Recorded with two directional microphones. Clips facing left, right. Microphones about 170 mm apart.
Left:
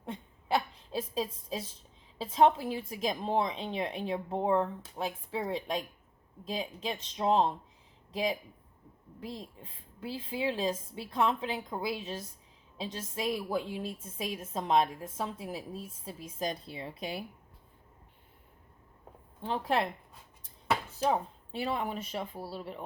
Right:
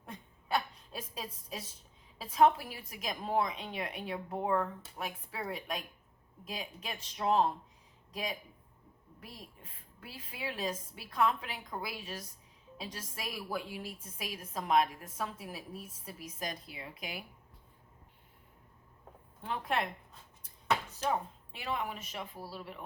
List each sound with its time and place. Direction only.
0.0 s a sound: 25° left (ahead or behind)
2.1 s a woman's voice: 25° left (ahead or behind)
19.4 s speech: 30° left (ahead or behind)
21.5 s speech: 30° left (ahead or behind)